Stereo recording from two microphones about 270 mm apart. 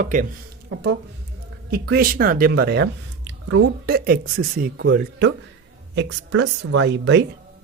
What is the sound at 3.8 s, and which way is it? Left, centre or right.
Speech, right.